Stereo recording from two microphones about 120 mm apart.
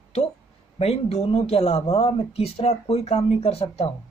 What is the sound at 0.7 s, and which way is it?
Speech, 60° left (ahead or behind).